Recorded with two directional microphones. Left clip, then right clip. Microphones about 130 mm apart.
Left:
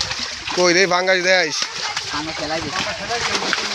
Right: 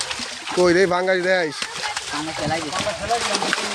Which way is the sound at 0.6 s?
35° right (ahead or behind).